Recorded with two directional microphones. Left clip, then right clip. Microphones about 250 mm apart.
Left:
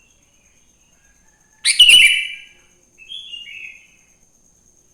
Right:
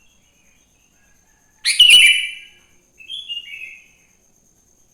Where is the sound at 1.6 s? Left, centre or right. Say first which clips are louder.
Left 1 dB; centre.